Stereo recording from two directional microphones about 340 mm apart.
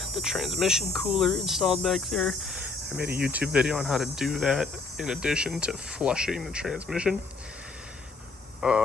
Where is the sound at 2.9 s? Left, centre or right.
Right.